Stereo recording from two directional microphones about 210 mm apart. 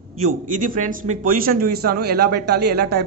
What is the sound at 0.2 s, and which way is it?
A man's voice, 40° right (ahead or behind).